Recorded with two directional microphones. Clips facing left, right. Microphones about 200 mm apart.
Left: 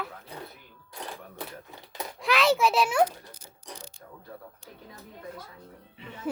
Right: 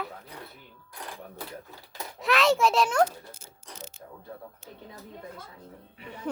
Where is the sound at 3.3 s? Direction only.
25° right (ahead or behind).